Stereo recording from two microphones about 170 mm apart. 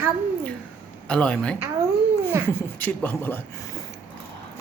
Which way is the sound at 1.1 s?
5° left (ahead or behind).